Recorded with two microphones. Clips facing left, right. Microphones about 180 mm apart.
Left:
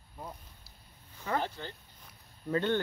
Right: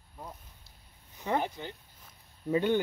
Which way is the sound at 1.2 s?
15° right (ahead or behind).